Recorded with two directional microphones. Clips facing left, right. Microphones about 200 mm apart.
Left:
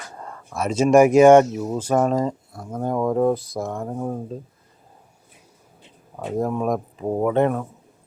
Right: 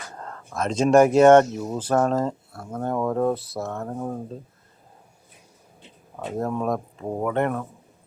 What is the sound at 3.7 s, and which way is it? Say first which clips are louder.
Speech: left 2 dB; 10° left (ahead or behind).